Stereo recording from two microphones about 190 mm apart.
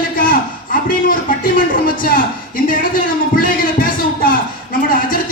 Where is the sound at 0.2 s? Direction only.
50° left (ahead or behind).